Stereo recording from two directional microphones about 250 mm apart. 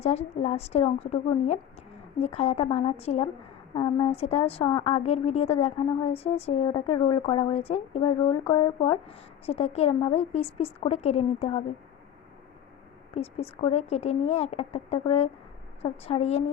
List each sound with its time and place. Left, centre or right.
0.0 s a woman's voice: left
13.1 s a woman's voice: left